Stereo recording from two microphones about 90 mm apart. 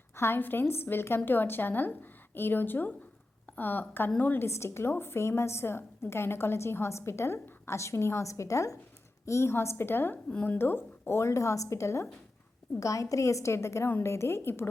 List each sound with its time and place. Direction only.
0.2 s a woman's voice: 25° left (ahead or behind)